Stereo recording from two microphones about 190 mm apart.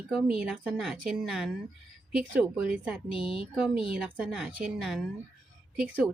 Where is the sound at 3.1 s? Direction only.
30° left (ahead or behind).